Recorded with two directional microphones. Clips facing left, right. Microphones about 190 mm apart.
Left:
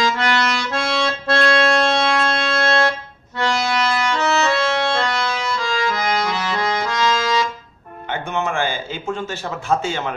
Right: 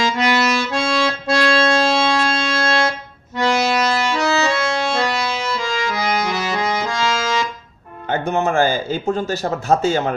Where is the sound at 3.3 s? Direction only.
15° right (ahead or behind).